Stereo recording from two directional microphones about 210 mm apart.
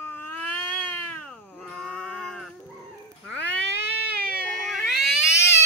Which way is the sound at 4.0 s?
45° right (ahead or behind).